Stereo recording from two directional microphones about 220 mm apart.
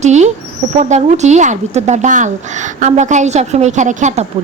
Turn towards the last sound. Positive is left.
turn(degrees=-30)  # may be behind; listen again after turning